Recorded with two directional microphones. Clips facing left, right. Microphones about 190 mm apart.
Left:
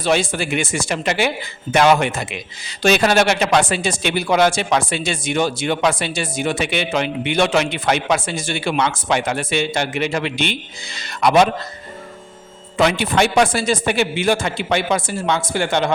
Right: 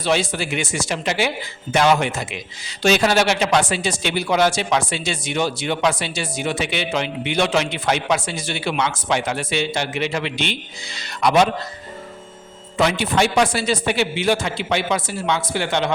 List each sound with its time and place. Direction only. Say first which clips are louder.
0.0 s speech: left 2 dB; 50° left (ahead or behind)
12.8 s speech: left 2 dB; 60° left (ahead or behind)